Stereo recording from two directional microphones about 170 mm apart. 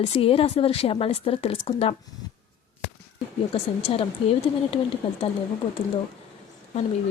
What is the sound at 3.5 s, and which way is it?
Speech, 30° left (ahead or behind).